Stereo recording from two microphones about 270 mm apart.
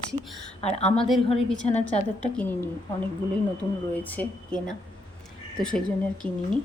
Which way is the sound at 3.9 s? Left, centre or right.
Centre.